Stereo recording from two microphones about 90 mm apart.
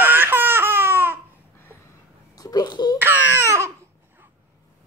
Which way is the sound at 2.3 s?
45° left (ahead or behind).